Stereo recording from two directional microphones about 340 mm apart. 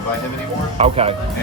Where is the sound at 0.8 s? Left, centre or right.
Centre.